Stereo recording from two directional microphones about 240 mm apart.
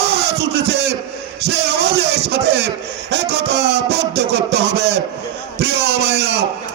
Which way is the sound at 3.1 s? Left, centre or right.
Right.